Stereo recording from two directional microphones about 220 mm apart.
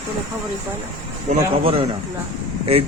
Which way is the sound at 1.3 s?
25° right (ahead or behind).